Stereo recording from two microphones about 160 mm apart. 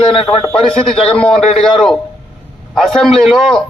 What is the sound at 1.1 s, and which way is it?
Speech, 5° left (ahead or behind).